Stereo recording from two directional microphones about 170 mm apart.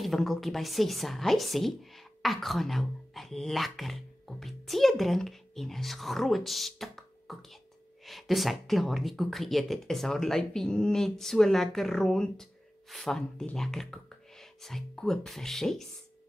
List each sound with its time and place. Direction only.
0.0 s a woman's voice: centre (ahead or behind)